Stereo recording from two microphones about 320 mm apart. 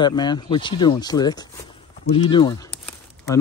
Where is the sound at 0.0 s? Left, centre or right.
Centre.